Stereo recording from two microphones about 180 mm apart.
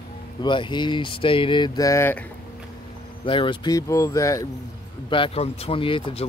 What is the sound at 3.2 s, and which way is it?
Speech, 30° left (ahead or behind).